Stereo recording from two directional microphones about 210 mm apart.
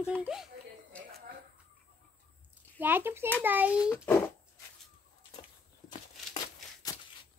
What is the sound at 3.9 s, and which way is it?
Speech, 10° left (ahead or behind).